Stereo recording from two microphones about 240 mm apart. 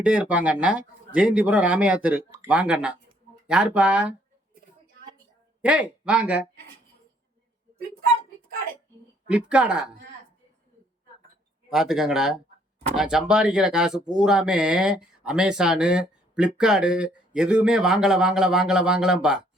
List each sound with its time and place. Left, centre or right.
0.0 s speech: centre
5.6 s speech: centre
9.3 s speech: centre
11.7 s speech: centre